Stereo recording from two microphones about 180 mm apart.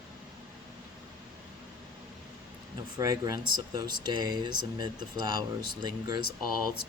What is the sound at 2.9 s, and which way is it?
Speech, 20° right (ahead or behind).